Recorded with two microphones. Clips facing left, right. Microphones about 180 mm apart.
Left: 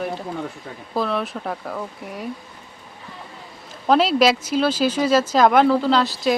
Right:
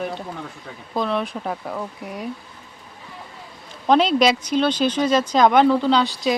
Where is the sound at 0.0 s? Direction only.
Centre (ahead or behind).